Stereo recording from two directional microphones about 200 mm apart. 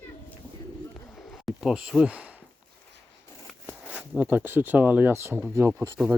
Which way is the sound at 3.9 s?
5° right (ahead or behind).